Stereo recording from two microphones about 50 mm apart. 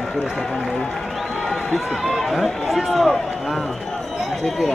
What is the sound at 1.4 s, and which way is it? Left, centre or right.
Speech, centre.